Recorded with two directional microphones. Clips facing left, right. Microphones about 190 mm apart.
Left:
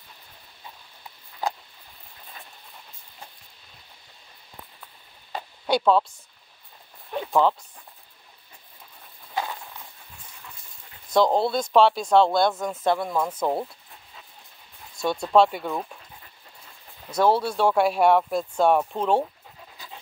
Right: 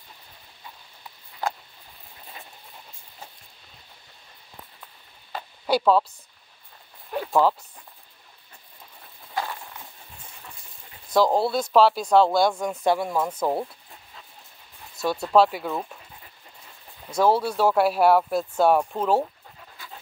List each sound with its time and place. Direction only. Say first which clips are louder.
5.7 s speech: even; 5° right (ahead or behind)
7.1 s a sound: even; 5° right (ahead or behind)
9.3 s a sound: even; 15° left (ahead or behind)
11.1 s speech: even; 5° right (ahead or behind)
15.0 s speech: even; 5° right (ahead or behind)
17.1 s speech: even; 5° right (ahead or behind)